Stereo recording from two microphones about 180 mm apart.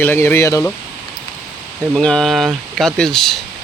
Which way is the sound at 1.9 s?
5° left (ahead or behind).